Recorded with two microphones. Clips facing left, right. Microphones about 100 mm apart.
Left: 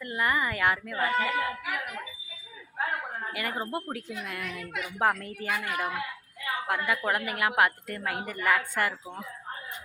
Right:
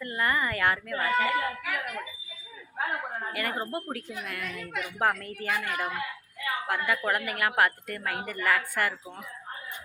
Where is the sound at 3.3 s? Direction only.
15° left (ahead or behind).